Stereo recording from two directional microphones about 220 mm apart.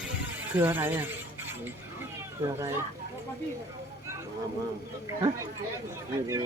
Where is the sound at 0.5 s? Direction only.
10° right (ahead or behind).